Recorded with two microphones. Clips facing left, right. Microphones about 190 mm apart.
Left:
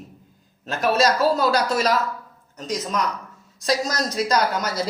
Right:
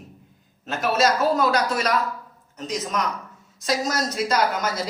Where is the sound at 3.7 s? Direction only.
35° left (ahead or behind).